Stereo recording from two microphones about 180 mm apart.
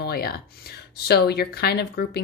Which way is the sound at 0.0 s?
60° left (ahead or behind).